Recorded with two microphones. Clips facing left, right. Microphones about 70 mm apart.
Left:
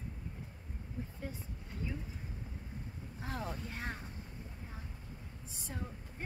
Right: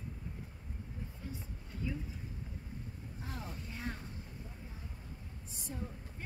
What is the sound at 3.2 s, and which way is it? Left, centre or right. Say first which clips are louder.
Speech: left 6 dB; left.